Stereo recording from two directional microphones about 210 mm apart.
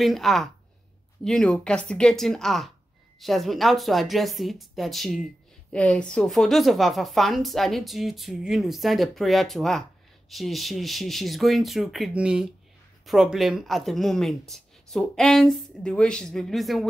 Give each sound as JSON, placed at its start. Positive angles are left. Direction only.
{"t": 0.0, "sound": "a woman's voice", "side_deg": 0}